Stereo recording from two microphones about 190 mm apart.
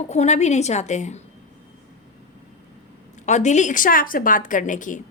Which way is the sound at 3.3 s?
40° left (ahead or behind).